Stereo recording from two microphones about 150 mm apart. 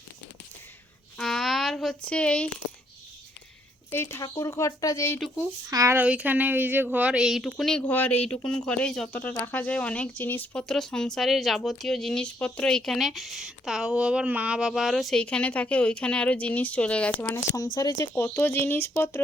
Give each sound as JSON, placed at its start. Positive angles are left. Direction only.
{"t": 1.2, "sound": "a sound", "side_deg": 0}
{"t": 2.0, "sound": "speech", "side_deg": 10}
{"t": 3.9, "sound": "speech", "side_deg": 15}
{"t": 5.6, "sound": "a woman's voice", "side_deg": -20}